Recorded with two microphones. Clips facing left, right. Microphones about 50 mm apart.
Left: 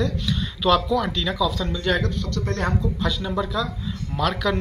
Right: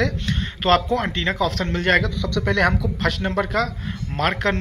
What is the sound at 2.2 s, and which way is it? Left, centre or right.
Speech, right.